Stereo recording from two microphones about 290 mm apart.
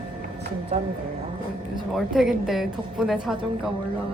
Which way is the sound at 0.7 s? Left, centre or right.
Right.